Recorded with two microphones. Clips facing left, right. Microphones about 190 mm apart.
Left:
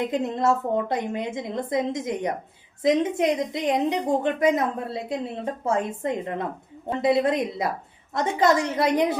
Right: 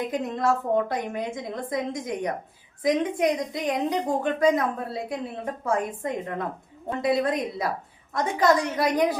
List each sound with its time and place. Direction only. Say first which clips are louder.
0.1 s a woman's voice: left 2 dB; 25° left (ahead or behind)